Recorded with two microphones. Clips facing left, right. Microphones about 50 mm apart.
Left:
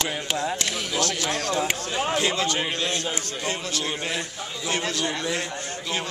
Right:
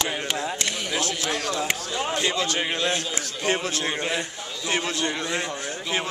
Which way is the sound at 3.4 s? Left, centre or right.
Right.